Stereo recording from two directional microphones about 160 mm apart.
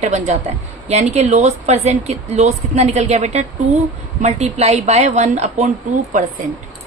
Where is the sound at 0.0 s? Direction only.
45° right (ahead or behind).